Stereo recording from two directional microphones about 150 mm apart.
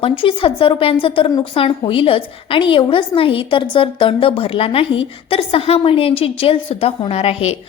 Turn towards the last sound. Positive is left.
turn(degrees=40)  # may be behind; listen again after turning